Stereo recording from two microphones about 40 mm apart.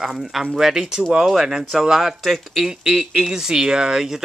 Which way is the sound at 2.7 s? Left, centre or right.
Centre.